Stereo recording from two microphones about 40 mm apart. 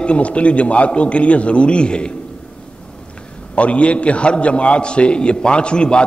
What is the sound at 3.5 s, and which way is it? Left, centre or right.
A man's voice, left.